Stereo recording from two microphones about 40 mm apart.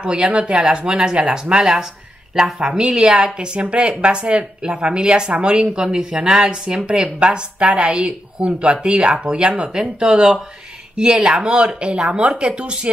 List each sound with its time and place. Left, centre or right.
0.0 s a woman's voice: right
2.8 s a woman's voice: right
11.4 s speech: right